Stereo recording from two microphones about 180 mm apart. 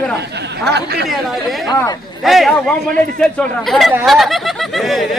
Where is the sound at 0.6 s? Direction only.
65° right (ahead or behind).